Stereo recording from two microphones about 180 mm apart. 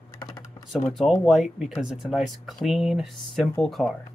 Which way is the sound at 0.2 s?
20° left (ahead or behind).